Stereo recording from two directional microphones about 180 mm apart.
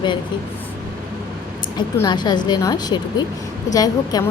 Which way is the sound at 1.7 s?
25° left (ahead or behind).